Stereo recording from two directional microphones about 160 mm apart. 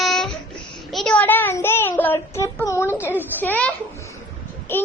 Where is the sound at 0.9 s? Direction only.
Centre (ahead or behind).